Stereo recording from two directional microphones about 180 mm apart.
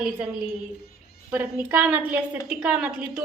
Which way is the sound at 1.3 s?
10° right (ahead or behind).